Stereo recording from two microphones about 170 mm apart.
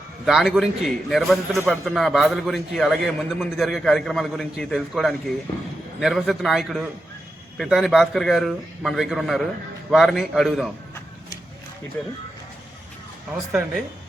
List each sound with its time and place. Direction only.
0.3 s a man's voice: centre (ahead or behind)
13.5 s a man's voice: 5° right (ahead or behind)